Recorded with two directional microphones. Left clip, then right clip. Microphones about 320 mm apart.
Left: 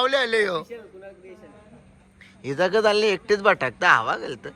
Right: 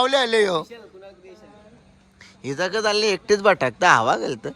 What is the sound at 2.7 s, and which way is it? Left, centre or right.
Speech, centre.